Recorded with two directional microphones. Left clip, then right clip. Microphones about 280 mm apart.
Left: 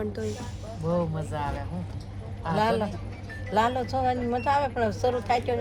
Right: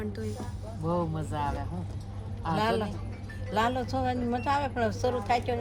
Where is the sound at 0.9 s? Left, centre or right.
Centre.